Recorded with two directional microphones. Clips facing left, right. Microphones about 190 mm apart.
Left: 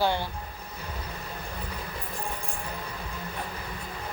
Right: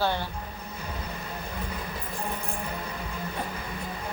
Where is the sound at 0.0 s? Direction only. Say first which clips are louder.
Left 1 dB; 15° left (ahead or behind).